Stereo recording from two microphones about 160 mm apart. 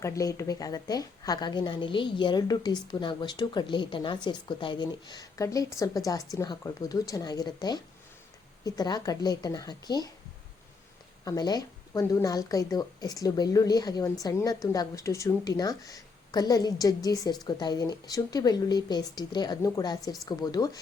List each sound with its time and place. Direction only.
0.0 s a woman's voice: 20° left (ahead or behind)
11.3 s a woman's voice: 25° left (ahead or behind)